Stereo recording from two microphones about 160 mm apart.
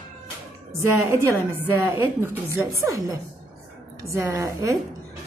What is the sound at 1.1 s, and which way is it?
A woman's voice, 15° right (ahead or behind).